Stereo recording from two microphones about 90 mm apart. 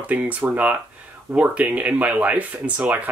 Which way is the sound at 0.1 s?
15° right (ahead or behind).